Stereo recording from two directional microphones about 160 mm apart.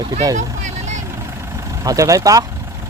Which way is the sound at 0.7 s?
45° right (ahead or behind).